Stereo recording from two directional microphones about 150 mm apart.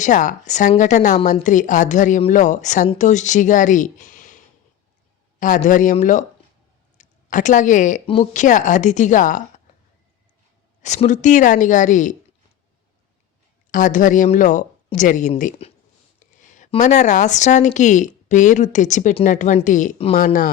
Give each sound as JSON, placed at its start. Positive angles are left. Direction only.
{"t": 0.0, "sound": "speech", "side_deg": 55}
{"t": 5.4, "sound": "speech", "side_deg": 60}
{"t": 8.0, "sound": "speech", "side_deg": 40}
{"t": 8.3, "sound": "speech", "side_deg": 55}
{"t": 10.8, "sound": "speech", "side_deg": 55}
{"t": 13.7, "sound": "speech", "side_deg": 60}
{"t": 15.6, "sound": "a sound", "side_deg": 45}
{"t": 16.5, "sound": "speech", "side_deg": 55}